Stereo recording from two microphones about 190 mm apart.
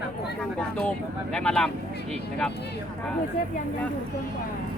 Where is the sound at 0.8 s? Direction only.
5° left (ahead or behind).